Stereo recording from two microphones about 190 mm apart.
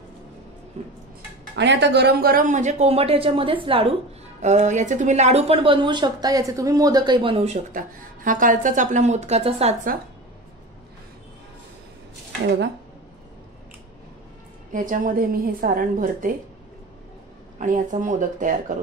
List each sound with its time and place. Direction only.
0.8 s a woman's voice: 35° right (ahead or behind)
1.5 s a woman's voice: 65° right (ahead or behind); by 9.8 s 30° right (ahead or behind)
14.7 s a woman's voice: 45° right (ahead or behind)
17.6 s a woman's voice: 40° right (ahead or behind)